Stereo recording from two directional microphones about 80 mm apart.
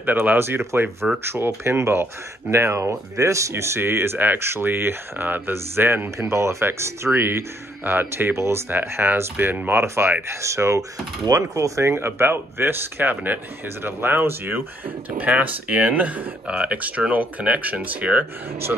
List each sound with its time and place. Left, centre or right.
0.0 s speech: right